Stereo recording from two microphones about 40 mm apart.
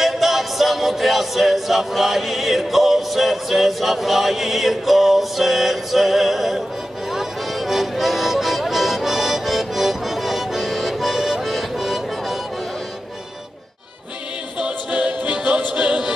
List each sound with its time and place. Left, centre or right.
0.0 s music: centre
14.9 s music: right